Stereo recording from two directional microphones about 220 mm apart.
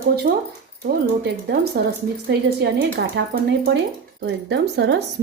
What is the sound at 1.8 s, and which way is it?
Speech, 45° right (ahead or behind).